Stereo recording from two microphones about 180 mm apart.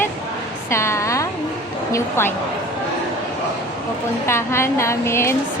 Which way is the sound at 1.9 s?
15° left (ahead or behind).